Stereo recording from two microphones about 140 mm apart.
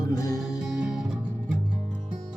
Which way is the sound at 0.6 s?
5° right (ahead or behind).